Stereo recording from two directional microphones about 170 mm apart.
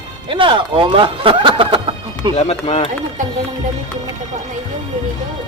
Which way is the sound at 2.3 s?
40° left (ahead or behind).